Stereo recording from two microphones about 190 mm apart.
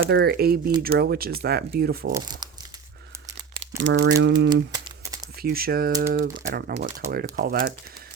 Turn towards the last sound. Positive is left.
turn(degrees=-50)  # may be behind; listen again after turning